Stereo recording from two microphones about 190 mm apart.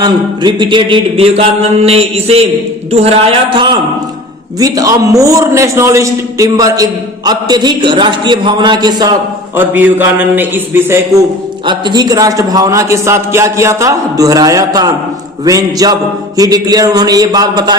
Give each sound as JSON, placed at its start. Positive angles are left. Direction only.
{"t": 0.0, "sound": "mantra", "side_deg": -25}
{"t": 2.9, "sound": "a man's voice", "side_deg": -35}
{"t": 9.6, "sound": "a man's voice", "side_deg": -10}
{"t": 11.6, "sound": "a man's voice", "side_deg": -25}